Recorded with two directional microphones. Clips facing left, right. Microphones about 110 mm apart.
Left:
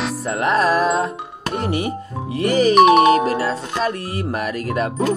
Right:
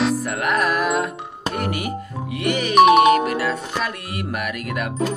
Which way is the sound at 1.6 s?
25° left (ahead or behind).